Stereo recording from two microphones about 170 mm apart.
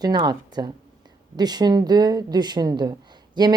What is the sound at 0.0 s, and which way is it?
A woman's voice, 25° right (ahead or behind).